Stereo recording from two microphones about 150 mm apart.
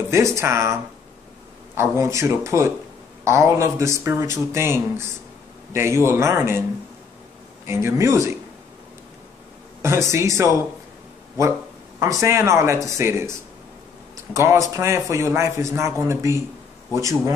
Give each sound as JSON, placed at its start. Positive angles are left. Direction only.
{"t": 0.1, "sound": "a man's voice", "side_deg": -20}
{"t": 1.8, "sound": "a man's voice", "side_deg": -20}
{"t": 7.6, "sound": "speech", "side_deg": -15}
{"t": 9.8, "sound": "a man's voice", "side_deg": -20}
{"t": 12.0, "sound": "a man's voice", "side_deg": -20}
{"t": 14.3, "sound": "a man's voice", "side_deg": -20}